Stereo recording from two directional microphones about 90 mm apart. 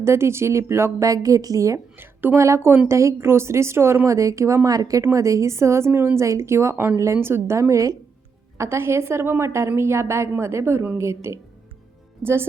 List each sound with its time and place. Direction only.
0.0 s speech: 30° right (ahead or behind)
2.0 s a woman's voice: 25° right (ahead or behind)